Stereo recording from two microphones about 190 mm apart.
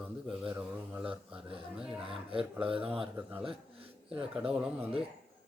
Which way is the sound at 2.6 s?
30° right (ahead or behind).